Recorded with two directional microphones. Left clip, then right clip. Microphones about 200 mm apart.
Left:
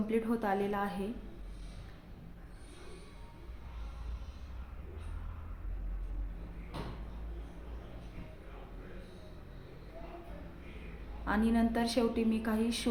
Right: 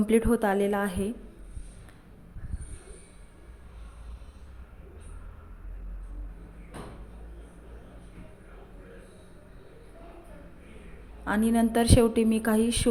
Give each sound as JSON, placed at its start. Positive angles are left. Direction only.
{"t": 0.1, "sound": "a woman's voice", "side_deg": -35}
{"t": 11.3, "sound": "a woman's voice", "side_deg": -25}